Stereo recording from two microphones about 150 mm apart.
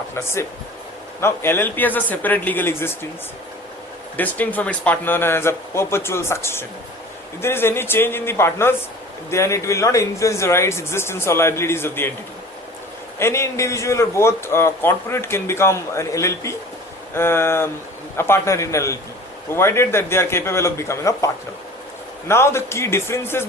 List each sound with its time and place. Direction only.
1.2 s a man's voice: 15° left (ahead or behind)
4.2 s a man's voice: 10° left (ahead or behind)
13.1 s a man's voice: 15° left (ahead or behind)
22.3 s a man's voice: 15° left (ahead or behind)